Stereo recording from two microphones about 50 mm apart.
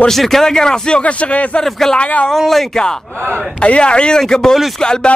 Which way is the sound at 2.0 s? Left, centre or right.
Left.